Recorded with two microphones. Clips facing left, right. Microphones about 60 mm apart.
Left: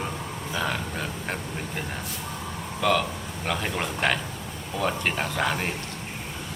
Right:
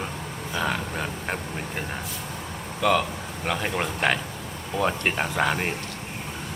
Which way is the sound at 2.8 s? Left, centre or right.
Centre.